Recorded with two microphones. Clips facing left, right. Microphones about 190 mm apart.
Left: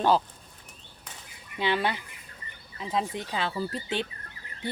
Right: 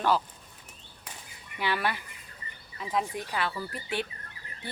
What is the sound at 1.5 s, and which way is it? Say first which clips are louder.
Speech: left 3 dB; 25° left (ahead or behind).